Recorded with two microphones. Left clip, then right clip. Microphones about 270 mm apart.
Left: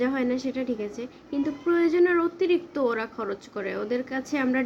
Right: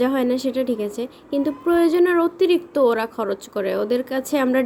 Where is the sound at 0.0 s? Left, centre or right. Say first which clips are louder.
Right 6 dB; centre.